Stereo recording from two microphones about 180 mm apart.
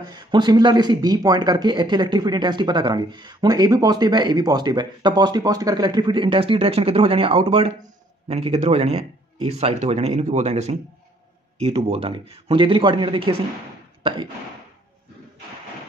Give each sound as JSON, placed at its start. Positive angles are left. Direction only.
{"t": 0.1, "sound": "speech", "side_deg": -25}